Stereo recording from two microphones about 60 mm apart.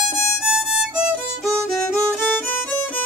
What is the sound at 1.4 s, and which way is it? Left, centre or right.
Music, centre.